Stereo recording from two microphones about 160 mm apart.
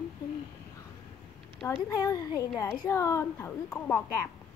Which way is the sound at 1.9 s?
20° left (ahead or behind).